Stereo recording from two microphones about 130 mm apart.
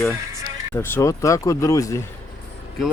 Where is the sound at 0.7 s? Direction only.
20° left (ahead or behind).